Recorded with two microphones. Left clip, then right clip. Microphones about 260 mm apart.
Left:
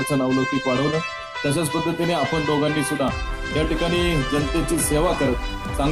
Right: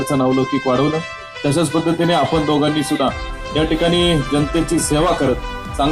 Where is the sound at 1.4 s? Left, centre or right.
Left.